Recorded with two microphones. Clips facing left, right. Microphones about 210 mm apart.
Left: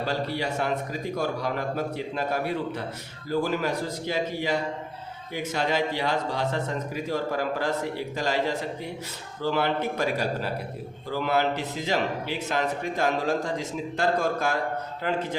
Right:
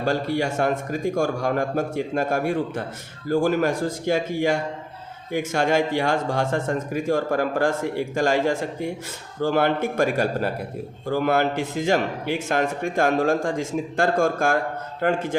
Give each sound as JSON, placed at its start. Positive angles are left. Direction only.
{"t": 0.0, "sound": "speech", "side_deg": -50}